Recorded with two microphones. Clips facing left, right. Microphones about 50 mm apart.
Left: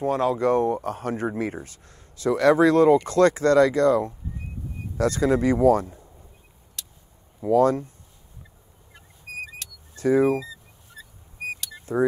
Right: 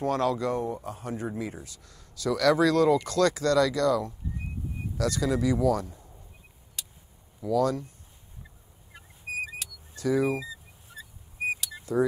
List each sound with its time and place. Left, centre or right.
0.0 s speech: left
0.5 s speech: left
6.8 s a sound: centre
7.4 s speech: left
8.9 s vehicle: centre
9.9 s speech: left
10.4 s a sound: centre
11.5 s vehicle: centre